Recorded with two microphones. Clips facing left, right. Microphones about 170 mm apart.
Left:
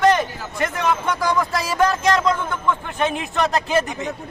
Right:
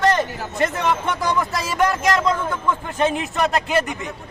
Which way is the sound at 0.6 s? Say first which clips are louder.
Even; 25° right (ahead or behind).